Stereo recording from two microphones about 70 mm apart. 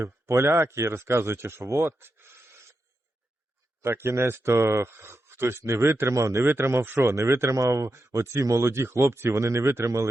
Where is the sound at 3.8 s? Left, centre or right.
Right.